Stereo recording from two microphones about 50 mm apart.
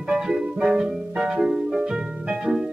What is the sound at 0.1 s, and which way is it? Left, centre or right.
Music, centre.